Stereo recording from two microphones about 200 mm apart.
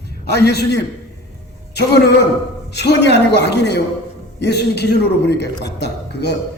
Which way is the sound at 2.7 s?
60° left (ahead or behind).